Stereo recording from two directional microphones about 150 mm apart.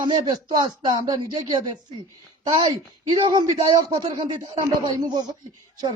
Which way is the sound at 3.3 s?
30° right (ahead or behind).